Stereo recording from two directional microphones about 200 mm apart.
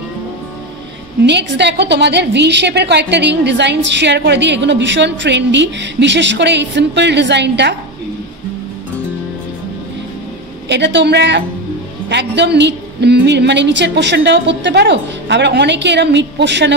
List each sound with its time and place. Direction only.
1.2 s a woman's voice: 60° right (ahead or behind)
10.7 s a woman's voice: 60° right (ahead or behind)